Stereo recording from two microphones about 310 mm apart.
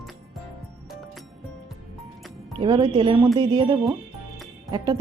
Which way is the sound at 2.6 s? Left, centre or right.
Centre.